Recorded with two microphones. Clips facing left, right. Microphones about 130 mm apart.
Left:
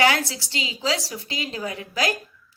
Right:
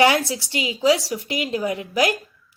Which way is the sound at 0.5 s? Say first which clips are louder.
Right 5 dB; 25° left (ahead or behind).